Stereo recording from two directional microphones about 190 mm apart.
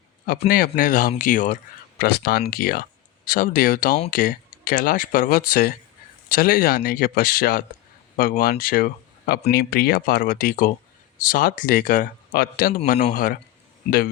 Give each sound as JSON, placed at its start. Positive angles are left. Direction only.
{"t": 0.3, "sound": "speech", "side_deg": 50}
{"t": 2.0, "sound": "speech", "side_deg": 55}